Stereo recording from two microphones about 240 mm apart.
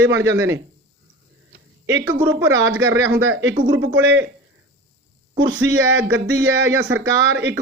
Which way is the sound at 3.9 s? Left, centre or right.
Centre.